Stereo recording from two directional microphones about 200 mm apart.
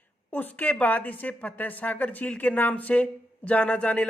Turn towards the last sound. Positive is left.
turn(degrees=5)  # may be behind; listen again after turning